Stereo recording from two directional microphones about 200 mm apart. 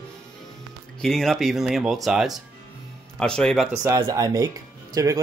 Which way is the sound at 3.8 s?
15° right (ahead or behind).